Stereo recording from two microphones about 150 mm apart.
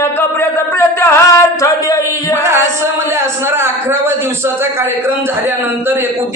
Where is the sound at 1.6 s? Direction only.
20° left (ahead or behind).